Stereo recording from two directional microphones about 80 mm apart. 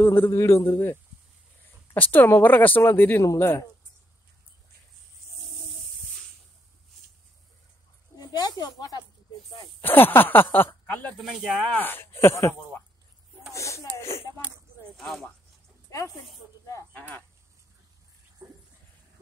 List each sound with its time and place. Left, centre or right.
0.0 s a man's voice: left
2.0 s speech: left
8.2 s speech: left
9.8 s speech: left
11.1 s speech: centre
11.7 s speech: left
13.5 s a sound: left
15.0 s speech: centre
18.4 s a sound: right